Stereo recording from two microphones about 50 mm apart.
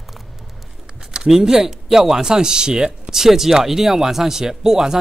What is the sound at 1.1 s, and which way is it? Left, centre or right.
Speech, centre.